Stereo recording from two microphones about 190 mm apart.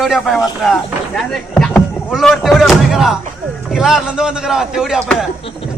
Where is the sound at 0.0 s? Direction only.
Centre (ahead or behind).